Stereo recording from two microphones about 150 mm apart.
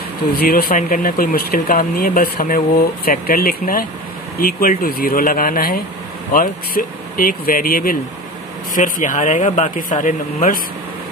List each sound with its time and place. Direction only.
0.4 s speech: 85° left; by 8.0 s 70° left (ahead or behind)
8.7 s speech: 60° left (ahead or behind)